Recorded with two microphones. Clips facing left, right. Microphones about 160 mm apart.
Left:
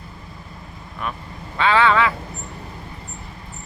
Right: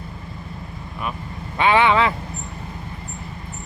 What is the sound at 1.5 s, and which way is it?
Speech, 15° right (ahead or behind).